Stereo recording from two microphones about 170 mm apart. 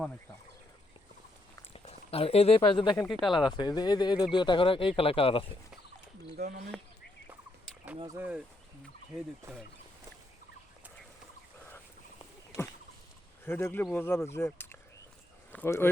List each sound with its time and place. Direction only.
1.7 s speech: 35° left (ahead or behind)
3.1 s speech: centre (ahead or behind)
3.6 s speech: 25° left (ahead or behind)
6.3 s speech: 60° right (ahead or behind)
8.0 s speech: 20° right (ahead or behind)
13.4 s speech: 15° left (ahead or behind)